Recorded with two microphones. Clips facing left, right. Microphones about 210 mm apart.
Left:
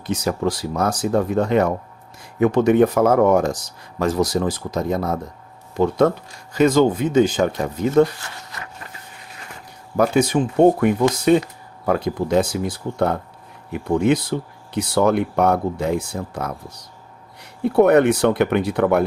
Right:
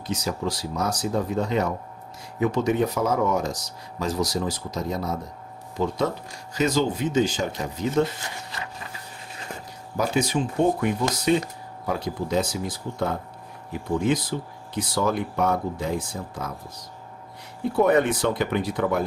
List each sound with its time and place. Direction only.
0.1 s speech: 55° left (ahead or behind)
8.0 s speech: 20° right (ahead or behind)
10.0 s speech: 55° left (ahead or behind)